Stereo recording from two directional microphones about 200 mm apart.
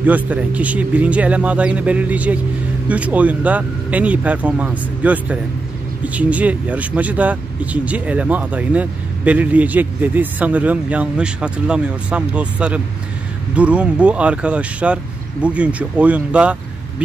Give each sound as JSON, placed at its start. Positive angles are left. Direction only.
{"t": 0.0, "sound": "speech", "side_deg": -10}